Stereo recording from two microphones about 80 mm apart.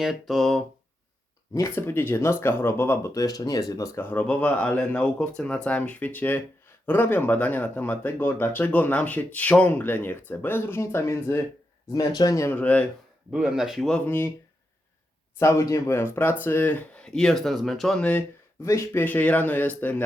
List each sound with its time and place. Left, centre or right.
0.0 s speech: centre
1.5 s speech: left
3.1 s speech: left
4.0 s speech: left
11.9 s speech: left
12.5 s speech: left
13.3 s speech: centre
14.0 s speech: left
15.4 s speech: left; by 18.0 s centre
18.6 s speech: left
18.9 s speech: left